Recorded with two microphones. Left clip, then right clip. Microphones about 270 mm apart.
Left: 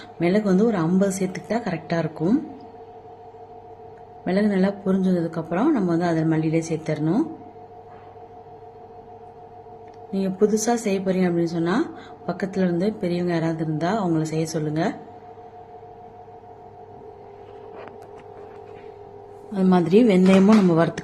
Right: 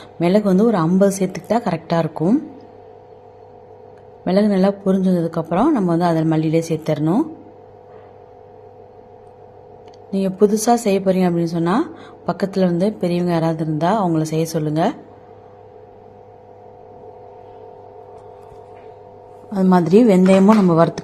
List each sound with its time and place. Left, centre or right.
0.2 s a woman's voice: centre
4.3 s a woman's voice: centre
10.1 s a woman's voice: centre
19.5 s a woman's voice: centre